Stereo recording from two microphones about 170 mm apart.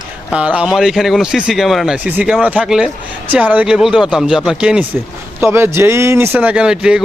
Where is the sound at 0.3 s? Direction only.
5° right (ahead or behind).